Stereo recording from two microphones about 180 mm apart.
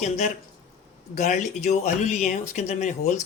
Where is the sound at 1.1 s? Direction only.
40° left (ahead or behind).